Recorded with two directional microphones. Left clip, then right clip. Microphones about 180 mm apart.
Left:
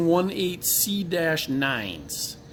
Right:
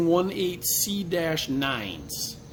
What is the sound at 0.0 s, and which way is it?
Speech, 50° left (ahead or behind).